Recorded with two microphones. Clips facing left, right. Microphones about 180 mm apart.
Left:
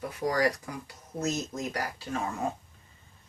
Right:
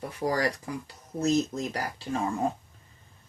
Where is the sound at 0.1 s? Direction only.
30° right (ahead or behind).